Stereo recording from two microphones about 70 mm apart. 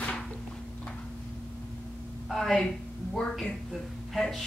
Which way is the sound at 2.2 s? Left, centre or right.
Centre.